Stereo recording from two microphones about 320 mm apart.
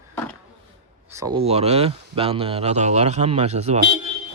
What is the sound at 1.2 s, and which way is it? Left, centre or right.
Speech, centre.